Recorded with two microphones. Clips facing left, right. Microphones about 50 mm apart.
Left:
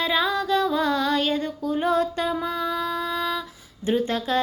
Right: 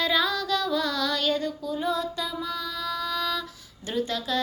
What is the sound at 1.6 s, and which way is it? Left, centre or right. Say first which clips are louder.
Music: left 5 dB; left.